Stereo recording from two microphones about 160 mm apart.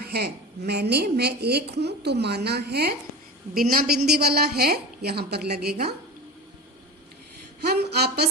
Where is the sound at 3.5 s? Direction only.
65° right (ahead or behind); by 6.0 s 85° right.